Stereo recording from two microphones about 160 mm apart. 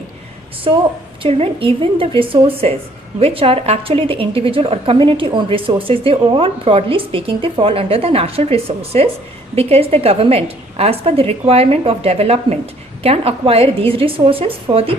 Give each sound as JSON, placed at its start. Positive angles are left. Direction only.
{"t": 0.7, "sound": "a woman's voice", "side_deg": -35}